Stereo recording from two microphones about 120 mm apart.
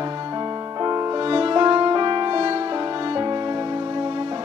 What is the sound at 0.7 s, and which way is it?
Music, 35° right (ahead or behind).